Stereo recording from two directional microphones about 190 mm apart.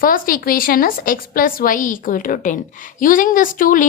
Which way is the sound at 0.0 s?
45° left (ahead or behind).